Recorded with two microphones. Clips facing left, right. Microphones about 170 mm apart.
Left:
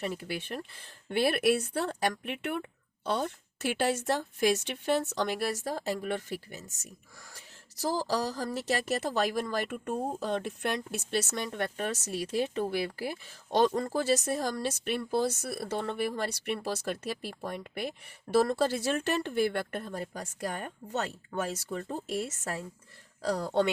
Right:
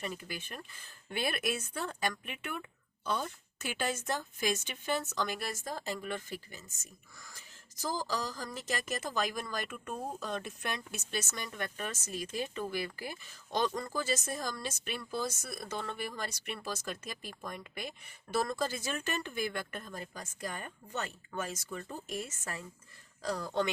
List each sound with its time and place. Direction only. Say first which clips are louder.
0.0 s speech: left 6 dB; 70° left (ahead or behind)